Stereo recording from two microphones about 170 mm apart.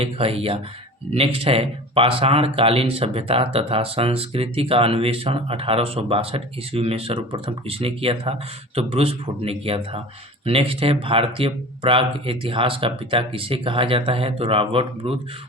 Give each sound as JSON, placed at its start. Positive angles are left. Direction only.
{"t": 0.0, "sound": "speech", "side_deg": -35}